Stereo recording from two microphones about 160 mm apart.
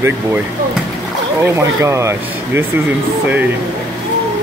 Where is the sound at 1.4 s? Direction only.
20° right (ahead or behind).